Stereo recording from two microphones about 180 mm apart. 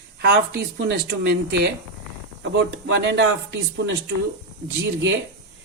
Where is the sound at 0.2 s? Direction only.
65° right (ahead or behind).